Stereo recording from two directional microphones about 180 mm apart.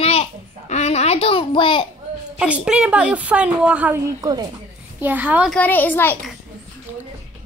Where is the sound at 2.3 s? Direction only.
5° right (ahead or behind).